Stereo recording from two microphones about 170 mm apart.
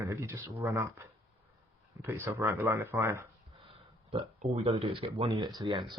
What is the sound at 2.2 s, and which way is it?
Speech, 10° right (ahead or behind).